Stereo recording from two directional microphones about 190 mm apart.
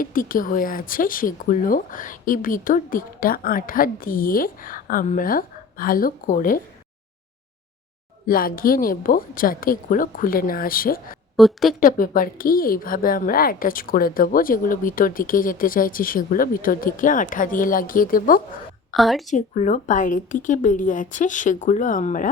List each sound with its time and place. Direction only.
0.0 s a woman's voice: 45° left (ahead or behind)
8.3 s a woman's voice: 50° left (ahead or behind)
11.3 s speech: centre (ahead or behind)
11.8 s a woman's voice: 45° left (ahead or behind)
18.9 s speech: centre (ahead or behind)
19.3 s a woman's voice: 40° left (ahead or behind)